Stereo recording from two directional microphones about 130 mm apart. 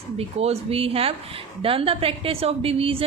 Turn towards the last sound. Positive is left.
turn(degrees=-45)  # may be behind; listen again after turning